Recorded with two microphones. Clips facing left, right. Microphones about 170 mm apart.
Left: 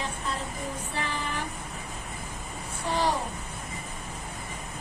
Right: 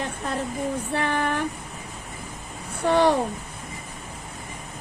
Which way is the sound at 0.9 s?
60° right (ahead or behind).